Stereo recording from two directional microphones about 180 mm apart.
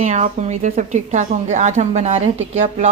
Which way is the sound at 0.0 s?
40° right (ahead or behind).